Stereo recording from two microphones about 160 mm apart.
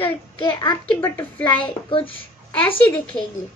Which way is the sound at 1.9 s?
35° left (ahead or behind).